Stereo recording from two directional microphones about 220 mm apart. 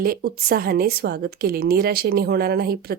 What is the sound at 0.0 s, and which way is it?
A woman's voice, 45° right (ahead or behind).